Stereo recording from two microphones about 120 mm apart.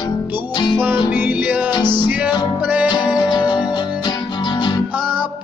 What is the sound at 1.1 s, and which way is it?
Music, 15° right (ahead or behind).